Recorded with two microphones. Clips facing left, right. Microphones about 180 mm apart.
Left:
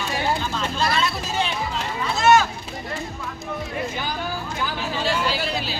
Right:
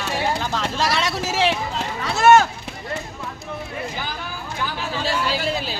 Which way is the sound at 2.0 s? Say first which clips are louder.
Right 3 dB; 55° right (ahead or behind).